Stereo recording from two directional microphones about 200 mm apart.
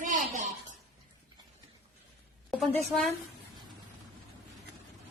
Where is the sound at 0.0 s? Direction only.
40° right (ahead or behind).